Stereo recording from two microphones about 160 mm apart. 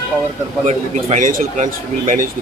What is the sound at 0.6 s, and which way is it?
Speech, 50° right (ahead or behind).